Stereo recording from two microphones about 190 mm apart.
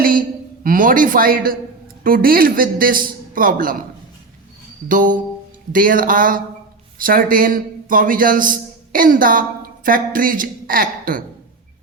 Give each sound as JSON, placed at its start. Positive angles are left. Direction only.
{"t": 0.0, "sound": "a sound", "side_deg": -50}
{"t": 2.0, "sound": "a man's voice", "side_deg": -50}
{"t": 4.9, "sound": "a man's voice", "side_deg": -45}